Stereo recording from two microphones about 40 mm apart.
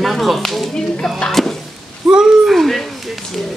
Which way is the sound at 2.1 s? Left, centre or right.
Centre.